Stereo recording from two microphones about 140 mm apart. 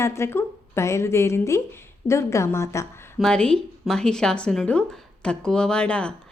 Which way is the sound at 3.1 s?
5° left (ahead or behind).